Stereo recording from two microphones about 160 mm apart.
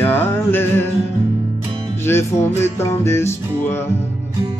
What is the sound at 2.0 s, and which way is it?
Music, 15° left (ahead or behind).